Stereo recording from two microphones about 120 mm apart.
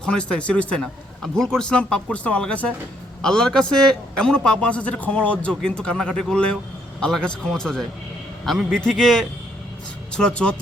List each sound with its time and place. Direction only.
0.0 s a man's voice: 5° left (ahead or behind)